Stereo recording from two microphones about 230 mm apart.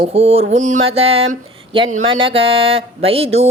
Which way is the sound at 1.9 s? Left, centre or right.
Right.